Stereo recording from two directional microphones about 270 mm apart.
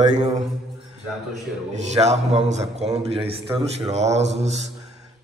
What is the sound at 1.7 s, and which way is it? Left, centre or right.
A man's voice, right.